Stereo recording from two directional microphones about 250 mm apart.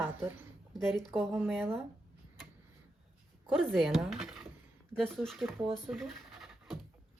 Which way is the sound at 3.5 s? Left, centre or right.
Centre.